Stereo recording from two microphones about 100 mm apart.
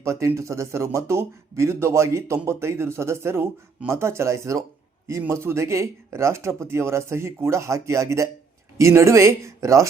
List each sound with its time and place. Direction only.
0.0 s speech: 30° right (ahead or behind)